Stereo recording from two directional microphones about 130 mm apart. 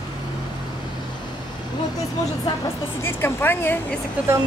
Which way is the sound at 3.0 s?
15° left (ahead or behind).